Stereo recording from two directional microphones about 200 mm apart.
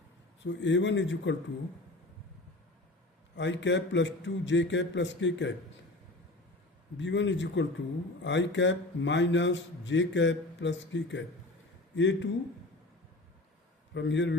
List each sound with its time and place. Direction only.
0.4 s a man's voice: 65° left (ahead or behind)
3.3 s a man's voice: 65° left (ahead or behind)
6.9 s a man's voice: 65° left (ahead or behind)
13.9 s a man's voice: 65° left (ahead or behind)